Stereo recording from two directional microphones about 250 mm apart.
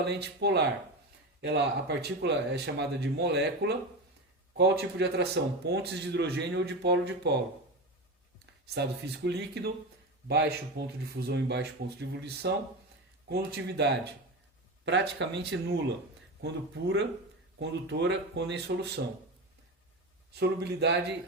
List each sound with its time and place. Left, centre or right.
0.0 s a man's voice: right
8.7 s a man's voice: right
20.3 s speech: right